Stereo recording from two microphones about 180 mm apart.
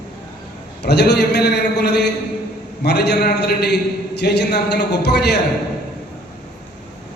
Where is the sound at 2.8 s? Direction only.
65° left (ahead or behind).